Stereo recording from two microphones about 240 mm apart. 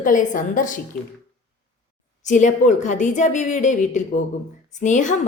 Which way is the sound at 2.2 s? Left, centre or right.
Left.